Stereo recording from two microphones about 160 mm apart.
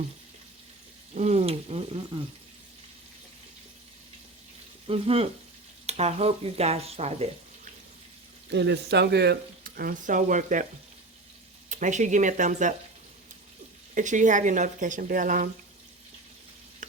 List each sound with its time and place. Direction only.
1.1 s stir: 45° right (ahead or behind)
4.9 s stir: 35° right (ahead or behind)
8.4 s speech: 90° right; by 10.7 s 55° right (ahead or behind)
11.7 s speech: 50° right (ahead or behind)
13.9 s speech: 50° right (ahead or behind)